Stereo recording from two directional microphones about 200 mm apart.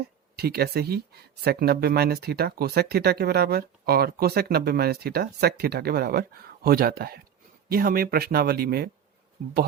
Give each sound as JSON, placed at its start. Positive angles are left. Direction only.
{"t": 0.3, "sound": "speech", "side_deg": -50}